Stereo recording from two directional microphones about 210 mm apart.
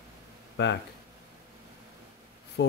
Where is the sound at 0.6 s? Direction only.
55° left (ahead or behind).